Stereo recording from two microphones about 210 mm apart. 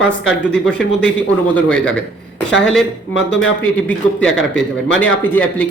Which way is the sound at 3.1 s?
60° left (ahead or behind).